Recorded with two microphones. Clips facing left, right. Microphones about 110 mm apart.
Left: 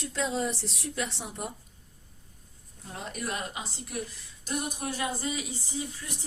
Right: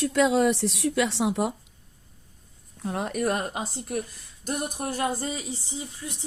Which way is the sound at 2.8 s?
70° right (ahead or behind).